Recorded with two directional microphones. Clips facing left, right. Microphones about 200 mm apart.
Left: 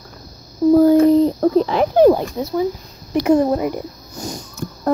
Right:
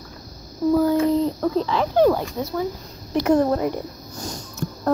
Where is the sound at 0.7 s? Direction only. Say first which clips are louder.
Left 7 dB; 40° left (ahead or behind).